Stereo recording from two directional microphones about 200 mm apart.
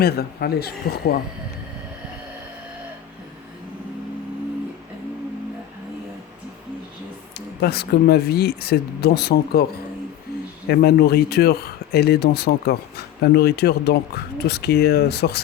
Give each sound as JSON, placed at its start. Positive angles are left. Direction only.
{"t": 0.0, "sound": "speech", "side_deg": 50}
{"t": 7.6, "sound": "speech", "side_deg": 50}
{"t": 10.7, "sound": "speech", "side_deg": 50}